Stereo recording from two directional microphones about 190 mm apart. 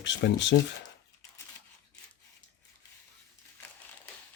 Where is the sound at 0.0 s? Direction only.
70° left (ahead or behind).